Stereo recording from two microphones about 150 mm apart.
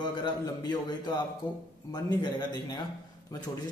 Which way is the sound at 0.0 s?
30° left (ahead or behind).